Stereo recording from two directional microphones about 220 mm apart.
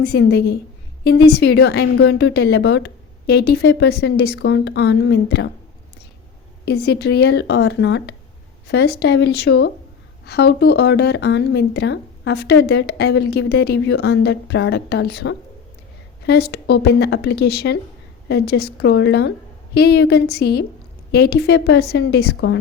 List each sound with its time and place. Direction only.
0.0 s speech: 50° left (ahead or behind)
6.7 s speech: 45° left (ahead or behind)